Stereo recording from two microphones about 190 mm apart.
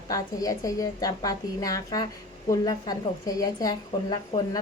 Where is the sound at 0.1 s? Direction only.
20° left (ahead or behind).